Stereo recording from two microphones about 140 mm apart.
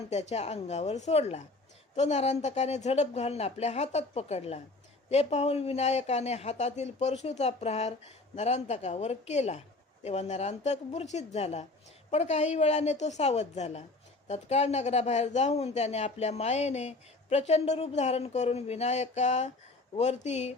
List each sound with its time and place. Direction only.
0.1 s speech: 50° left (ahead or behind)